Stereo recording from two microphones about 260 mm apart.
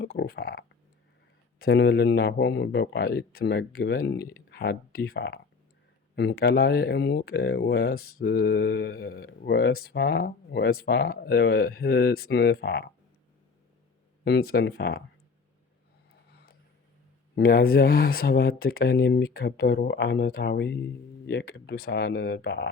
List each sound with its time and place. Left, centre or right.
0.0 s speech: left
14.3 s speech: left
17.3 s speech: left